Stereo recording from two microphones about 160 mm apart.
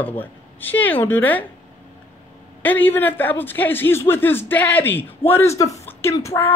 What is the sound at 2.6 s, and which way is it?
A man's voice, 10° left (ahead or behind).